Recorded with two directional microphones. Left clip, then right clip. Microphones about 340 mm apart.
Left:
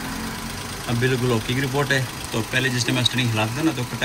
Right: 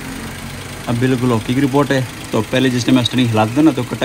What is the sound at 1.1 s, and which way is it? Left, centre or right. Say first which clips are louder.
Speech: right 5 dB; centre.